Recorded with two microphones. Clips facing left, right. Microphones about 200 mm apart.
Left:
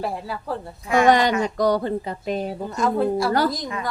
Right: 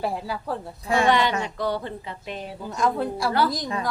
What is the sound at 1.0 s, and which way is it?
Speech, 45° left (ahead or behind).